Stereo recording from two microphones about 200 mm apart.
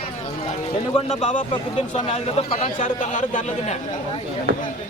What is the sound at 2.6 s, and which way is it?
Speech, 40° left (ahead or behind).